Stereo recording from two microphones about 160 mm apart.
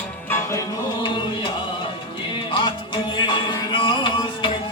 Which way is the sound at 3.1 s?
30° left (ahead or behind).